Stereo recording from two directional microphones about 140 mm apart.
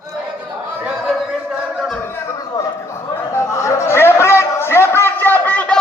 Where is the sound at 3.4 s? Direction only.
20° left (ahead or behind).